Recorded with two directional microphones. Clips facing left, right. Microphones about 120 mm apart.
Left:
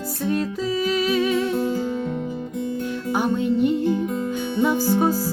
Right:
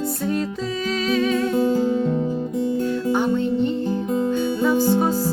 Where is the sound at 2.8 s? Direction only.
10° left (ahead or behind).